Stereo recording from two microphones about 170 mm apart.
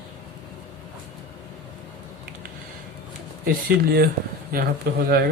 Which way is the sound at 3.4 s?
65° right (ahead or behind).